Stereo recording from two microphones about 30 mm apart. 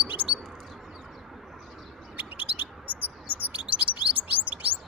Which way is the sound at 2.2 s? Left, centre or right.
Right.